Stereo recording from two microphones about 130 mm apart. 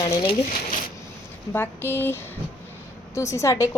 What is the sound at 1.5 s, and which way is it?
A woman's voice, 15° left (ahead or behind).